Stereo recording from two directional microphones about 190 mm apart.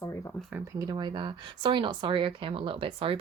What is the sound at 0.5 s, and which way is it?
A woman's voice, 20° right (ahead or behind).